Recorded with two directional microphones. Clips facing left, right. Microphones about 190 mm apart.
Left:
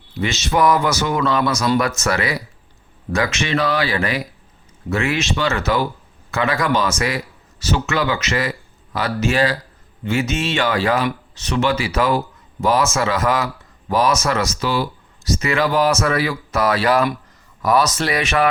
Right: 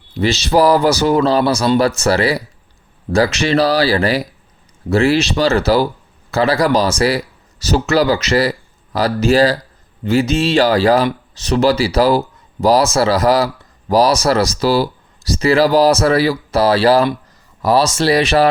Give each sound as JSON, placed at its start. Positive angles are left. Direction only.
{"t": 0.1, "sound": "speech", "side_deg": -35}